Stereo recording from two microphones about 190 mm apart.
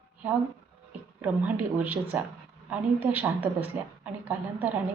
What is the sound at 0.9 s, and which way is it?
A woman's voice, 10° right (ahead or behind).